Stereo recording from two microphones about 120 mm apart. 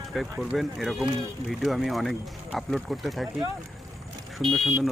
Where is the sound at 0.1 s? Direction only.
Centre (ahead or behind).